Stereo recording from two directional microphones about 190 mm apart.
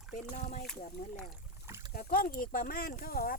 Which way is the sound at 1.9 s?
50° left (ahead or behind).